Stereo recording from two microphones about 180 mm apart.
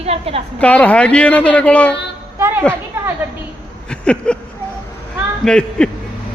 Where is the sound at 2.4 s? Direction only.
15° right (ahead or behind).